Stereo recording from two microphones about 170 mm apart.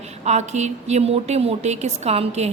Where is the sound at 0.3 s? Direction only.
40° right (ahead or behind).